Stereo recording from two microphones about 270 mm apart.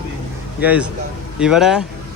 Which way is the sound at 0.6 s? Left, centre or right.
Centre.